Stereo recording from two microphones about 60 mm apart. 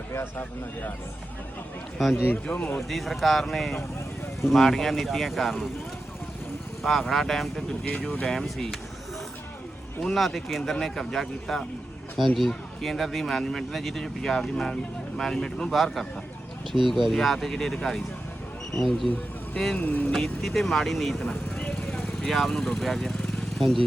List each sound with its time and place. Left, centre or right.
0.3 s speech: left
2.3 s speech: left
2.9 s speech: centre
6.8 s speech: centre
10.0 s speech: centre
19.8 s speech: left
20.1 s speech: centre